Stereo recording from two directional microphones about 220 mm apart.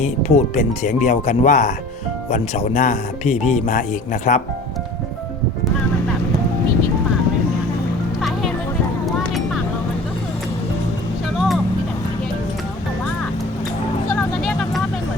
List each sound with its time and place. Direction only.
0.0 s speech: 30° left (ahead or behind)
8.2 s music: centre (ahead or behind)
14.1 s vehicle: 5° left (ahead or behind)